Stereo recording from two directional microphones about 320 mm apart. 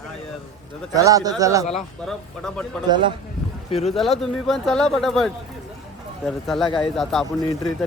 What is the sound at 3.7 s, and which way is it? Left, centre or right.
Speech, centre.